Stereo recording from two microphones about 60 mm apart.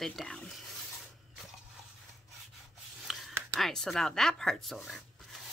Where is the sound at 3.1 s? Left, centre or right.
Centre.